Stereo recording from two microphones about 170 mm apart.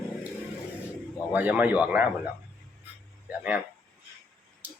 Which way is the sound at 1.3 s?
10° right (ahead or behind).